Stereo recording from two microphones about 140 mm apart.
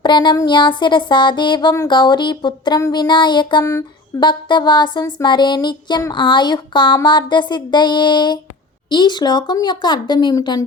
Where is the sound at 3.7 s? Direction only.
25° left (ahead or behind).